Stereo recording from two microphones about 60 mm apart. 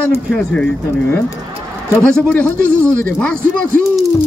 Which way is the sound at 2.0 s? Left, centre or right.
Centre.